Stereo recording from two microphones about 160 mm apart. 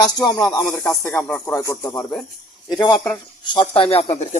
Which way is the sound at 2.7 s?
25° left (ahead or behind).